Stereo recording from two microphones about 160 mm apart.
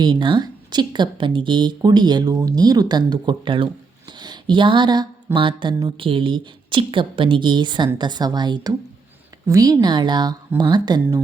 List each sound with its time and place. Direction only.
0.0 s speech: 30° right (ahead or behind)